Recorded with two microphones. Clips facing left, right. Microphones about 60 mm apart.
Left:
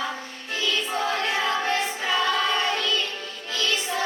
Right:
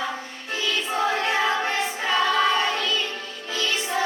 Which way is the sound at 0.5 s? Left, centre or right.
Centre.